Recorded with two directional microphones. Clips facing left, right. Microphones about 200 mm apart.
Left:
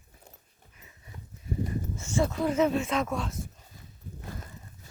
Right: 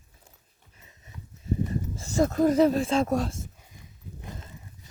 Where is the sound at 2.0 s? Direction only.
40° right (ahead or behind).